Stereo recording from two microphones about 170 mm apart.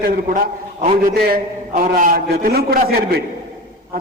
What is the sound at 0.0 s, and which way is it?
A man's voice, 55° right (ahead or behind).